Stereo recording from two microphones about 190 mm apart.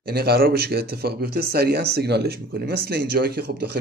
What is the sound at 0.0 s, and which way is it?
Speech, 55° right (ahead or behind).